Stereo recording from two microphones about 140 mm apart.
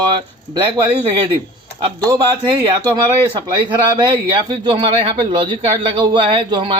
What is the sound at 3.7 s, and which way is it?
A man's voice, 35° right (ahead or behind).